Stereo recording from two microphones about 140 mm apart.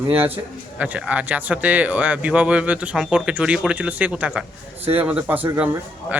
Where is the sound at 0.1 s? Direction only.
15° right (ahead or behind).